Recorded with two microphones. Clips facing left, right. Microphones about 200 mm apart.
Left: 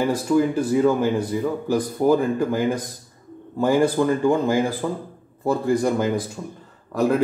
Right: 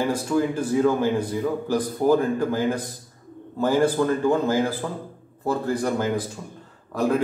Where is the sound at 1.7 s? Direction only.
10° left (ahead or behind).